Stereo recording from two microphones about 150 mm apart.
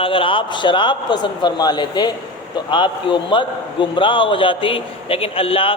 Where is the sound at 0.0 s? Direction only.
35° left (ahead or behind).